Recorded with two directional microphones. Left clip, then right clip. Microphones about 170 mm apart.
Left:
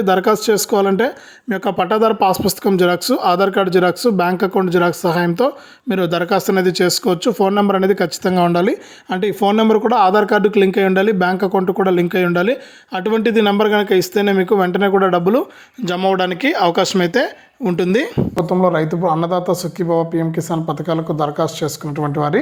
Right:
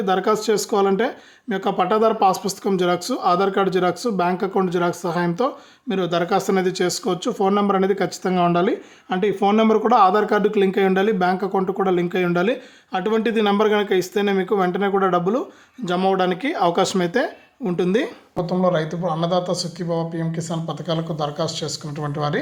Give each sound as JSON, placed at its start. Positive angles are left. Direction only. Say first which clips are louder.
{"t": 0.0, "sound": "speech", "louder": "left 5 dB", "side_deg": 30}
{"t": 18.3, "sound": "speech", "louder": "left 4 dB", "side_deg": 50}